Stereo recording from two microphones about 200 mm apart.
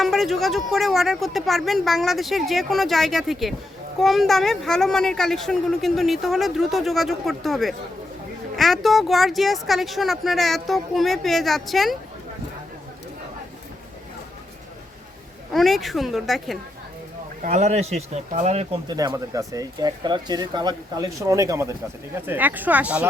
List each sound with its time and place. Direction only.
0.0 s speech: centre (ahead or behind)
15.5 s speech: centre (ahead or behind)
17.4 s speech: 35° right (ahead or behind)
18.9 s speech: 20° right (ahead or behind)